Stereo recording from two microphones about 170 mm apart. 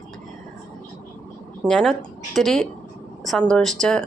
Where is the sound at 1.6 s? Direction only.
5° left (ahead or behind).